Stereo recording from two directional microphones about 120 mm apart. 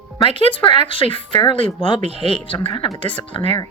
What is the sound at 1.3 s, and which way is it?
Speech, 35° left (ahead or behind).